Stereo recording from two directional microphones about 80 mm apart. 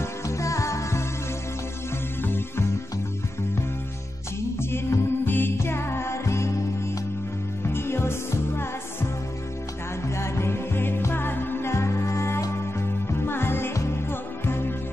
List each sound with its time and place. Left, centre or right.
0.0 s music: left
2.2 s music: left
4.6 s music: left
7.6 s music: left
10.0 s music: left